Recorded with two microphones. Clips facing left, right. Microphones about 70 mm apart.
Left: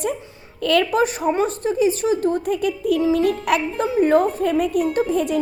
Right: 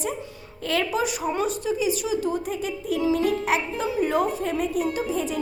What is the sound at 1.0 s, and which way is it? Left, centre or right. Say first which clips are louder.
A woman's voice: left 6 dB; left.